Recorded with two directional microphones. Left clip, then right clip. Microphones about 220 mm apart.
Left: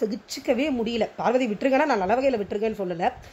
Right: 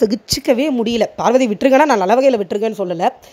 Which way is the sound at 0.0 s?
45° right (ahead or behind).